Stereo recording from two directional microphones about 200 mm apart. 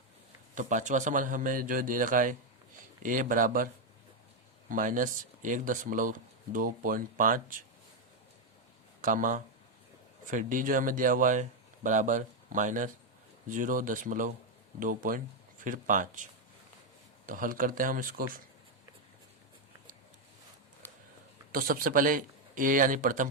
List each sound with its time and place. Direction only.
0.5 s speech: 40° right (ahead or behind)
4.7 s speech: 40° right (ahead or behind)
9.0 s speech: 40° right (ahead or behind)
17.2 s speech: 45° right (ahead or behind)
20.8 s a sound: 10° left (ahead or behind)
21.5 s speech: 45° right (ahead or behind)